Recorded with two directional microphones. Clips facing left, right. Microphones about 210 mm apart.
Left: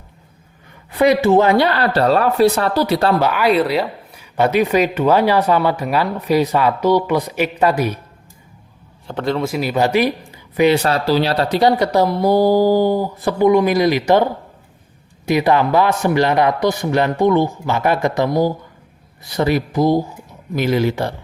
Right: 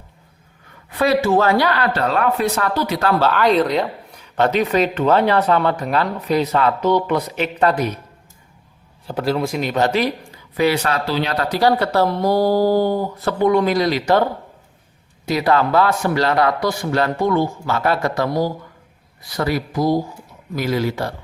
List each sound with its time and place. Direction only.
0.9 s speech: 20° left (ahead or behind)
3.2 s speech: 10° left (ahead or behind)
9.0 s speech: 5° right (ahead or behind); by 10.1 s 10° left (ahead or behind)
10.8 s speech: 35° left (ahead or behind); by 14.3 s 15° left (ahead or behind)
15.3 s speech: 15° left (ahead or behind)